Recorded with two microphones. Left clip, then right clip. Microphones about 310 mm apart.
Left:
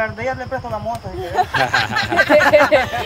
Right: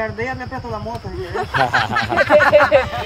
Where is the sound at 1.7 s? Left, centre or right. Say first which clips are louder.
Even; left.